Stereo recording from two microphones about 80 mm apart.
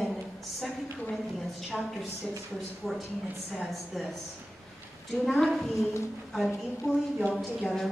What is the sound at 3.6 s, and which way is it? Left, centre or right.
Speech, centre.